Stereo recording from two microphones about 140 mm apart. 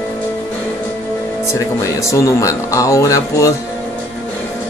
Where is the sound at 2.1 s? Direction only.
20° left (ahead or behind).